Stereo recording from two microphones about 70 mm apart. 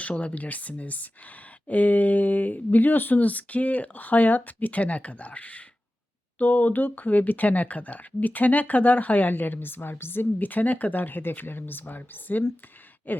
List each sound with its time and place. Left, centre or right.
0.0 s speech: centre